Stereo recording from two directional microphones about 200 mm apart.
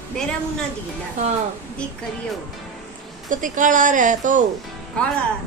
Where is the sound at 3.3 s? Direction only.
40° right (ahead or behind).